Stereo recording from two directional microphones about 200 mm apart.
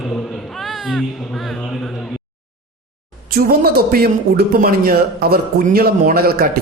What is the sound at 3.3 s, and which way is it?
Speech, 50° right (ahead or behind).